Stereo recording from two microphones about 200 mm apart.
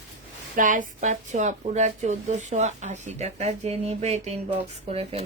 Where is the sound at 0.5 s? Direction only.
40° right (ahead or behind).